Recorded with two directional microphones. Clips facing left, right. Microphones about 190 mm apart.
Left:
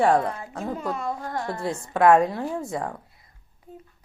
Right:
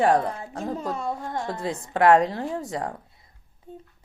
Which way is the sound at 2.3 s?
35° right (ahead or behind).